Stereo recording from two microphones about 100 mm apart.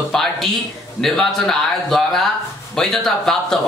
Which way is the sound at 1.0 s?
5° left (ahead or behind).